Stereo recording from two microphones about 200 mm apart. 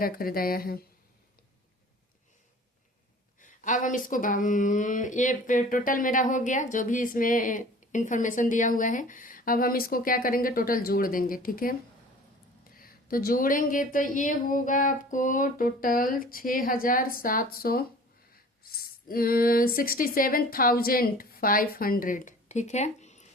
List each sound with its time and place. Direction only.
0.0 s speech: 45° left (ahead or behind)
3.4 s speech: 40° left (ahead or behind)
19.0 s speech: 45° left (ahead or behind)